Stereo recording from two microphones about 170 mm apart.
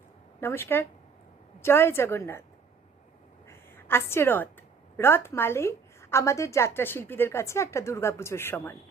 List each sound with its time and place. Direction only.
0.3 s a woman's voice: 15° left (ahead or behind)
3.8 s a woman's voice: 15° left (ahead or behind)